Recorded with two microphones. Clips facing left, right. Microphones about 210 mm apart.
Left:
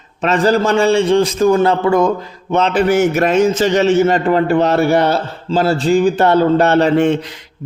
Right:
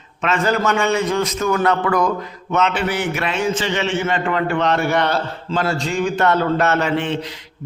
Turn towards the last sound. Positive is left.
turn(degrees=40)  # may be behind; listen again after turning